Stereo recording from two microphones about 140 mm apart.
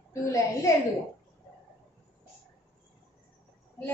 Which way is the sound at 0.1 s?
20° left (ahead or behind).